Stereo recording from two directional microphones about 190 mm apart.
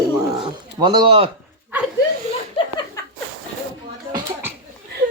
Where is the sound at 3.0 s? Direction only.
15° left (ahead or behind).